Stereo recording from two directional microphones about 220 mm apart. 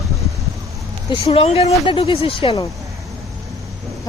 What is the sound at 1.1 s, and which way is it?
Speech, 25° left (ahead or behind).